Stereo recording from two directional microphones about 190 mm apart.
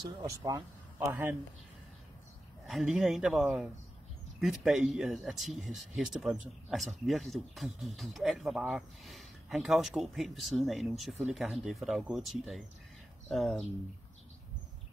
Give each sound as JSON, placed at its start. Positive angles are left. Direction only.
{"t": 0.0, "sound": "speech", "side_deg": -20}
{"t": 2.6, "sound": "speech", "side_deg": 0}